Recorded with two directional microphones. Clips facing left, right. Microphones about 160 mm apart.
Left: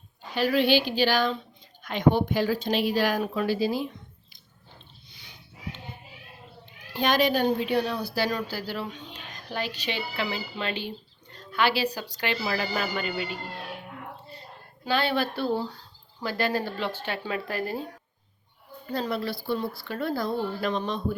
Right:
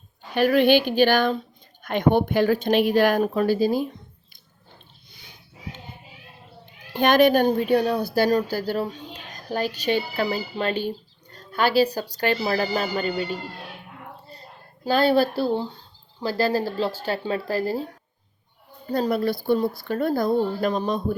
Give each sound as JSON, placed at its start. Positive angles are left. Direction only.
{"t": 0.3, "sound": "speech", "side_deg": -55}
{"t": 6.9, "sound": "a woman's voice", "side_deg": -55}
{"t": 14.8, "sound": "speech", "side_deg": -40}
{"t": 15.5, "sound": "speech", "side_deg": -25}
{"t": 18.9, "sound": "speech", "side_deg": -40}